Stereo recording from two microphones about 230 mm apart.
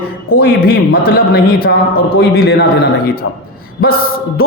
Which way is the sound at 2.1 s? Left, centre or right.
Left.